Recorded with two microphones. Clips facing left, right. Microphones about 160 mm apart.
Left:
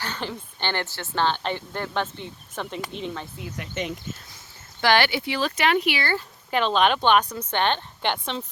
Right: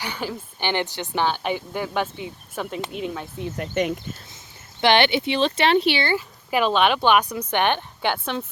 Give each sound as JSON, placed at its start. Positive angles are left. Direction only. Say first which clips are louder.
{"t": 0.0, "sound": "a woman's voice", "louder": "right 2 dB", "side_deg": -10}
{"t": 3.6, "sound": "speech", "louder": "right 7 dB", "side_deg": -55}
{"t": 4.8, "sound": "speech", "louder": "right 3 dB", "side_deg": -20}
{"t": 6.1, "sound": "a woman's voice", "louder": "right 3 dB", "side_deg": -10}